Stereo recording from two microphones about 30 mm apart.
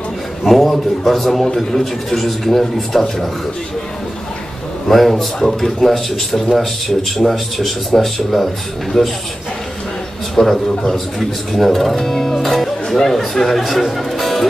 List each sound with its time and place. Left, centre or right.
0.4 s a man's voice: centre
4.8 s a man's voice: centre
10.3 s a man's voice: centre